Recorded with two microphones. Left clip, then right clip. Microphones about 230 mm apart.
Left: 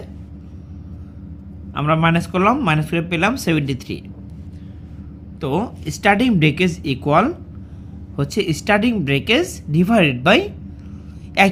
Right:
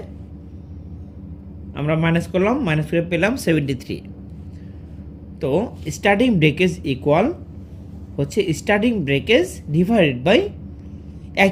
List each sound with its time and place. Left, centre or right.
1.7 s a woman's voice: left
5.4 s a woman's voice: centre